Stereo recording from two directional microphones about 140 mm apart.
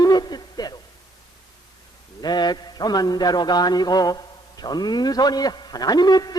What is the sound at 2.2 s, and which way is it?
A man's voice, 30° left (ahead or behind).